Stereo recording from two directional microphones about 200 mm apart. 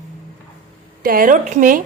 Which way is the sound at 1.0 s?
45° right (ahead or behind).